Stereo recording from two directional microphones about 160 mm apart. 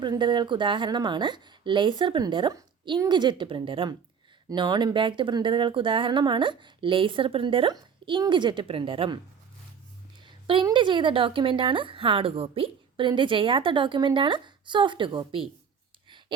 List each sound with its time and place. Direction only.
0.0 s a woman's voice: 30° right (ahead or behind)
10.2 s a woman's voice: 30° right (ahead or behind)